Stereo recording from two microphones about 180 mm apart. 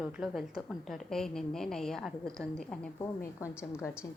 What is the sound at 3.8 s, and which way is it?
Speech, 15° left (ahead or behind).